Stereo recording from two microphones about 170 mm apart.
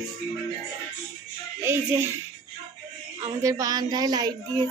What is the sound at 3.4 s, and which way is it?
Speech, 20° right (ahead or behind).